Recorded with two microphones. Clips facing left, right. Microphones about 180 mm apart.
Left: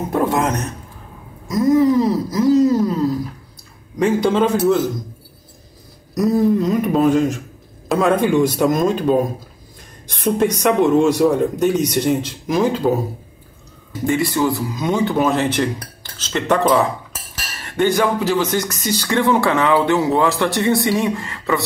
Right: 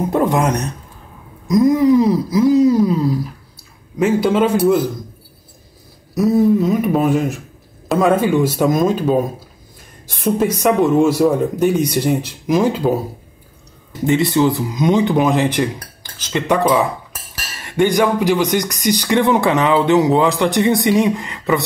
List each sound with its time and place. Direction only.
0.1 s speech: 15° right (ahead or behind)
6.1 s speech: centre (ahead or behind)
10.2 s speech: 5° right (ahead or behind)
14.0 s speech: 20° right (ahead or behind)